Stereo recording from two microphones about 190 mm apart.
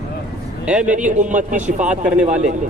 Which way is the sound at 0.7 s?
5° right (ahead or behind).